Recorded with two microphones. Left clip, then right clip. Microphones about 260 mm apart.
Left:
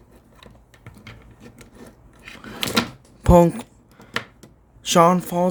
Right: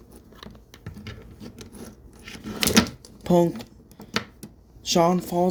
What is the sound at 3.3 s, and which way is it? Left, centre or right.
Speech, left.